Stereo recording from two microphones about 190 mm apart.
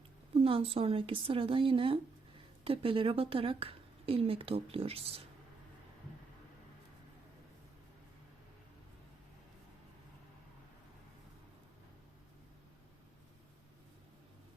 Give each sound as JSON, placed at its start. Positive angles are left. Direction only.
{"t": 0.4, "sound": "speech", "side_deg": -30}